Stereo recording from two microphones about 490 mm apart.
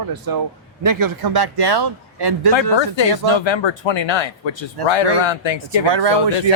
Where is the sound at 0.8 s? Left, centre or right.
Right.